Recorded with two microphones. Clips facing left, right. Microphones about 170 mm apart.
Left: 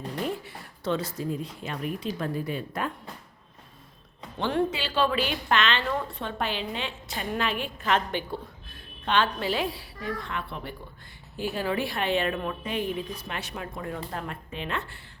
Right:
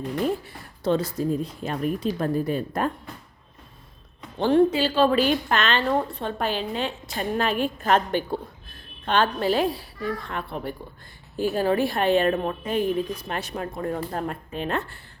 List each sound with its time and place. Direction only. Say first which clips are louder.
0.4 s speech: right 5 dB; 35° right (ahead or behind)
4.4 s a woman's voice: right 8 dB; 40° right (ahead or behind)